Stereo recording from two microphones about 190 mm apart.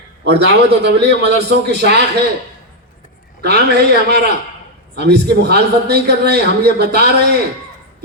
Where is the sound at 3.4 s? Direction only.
60° right (ahead or behind).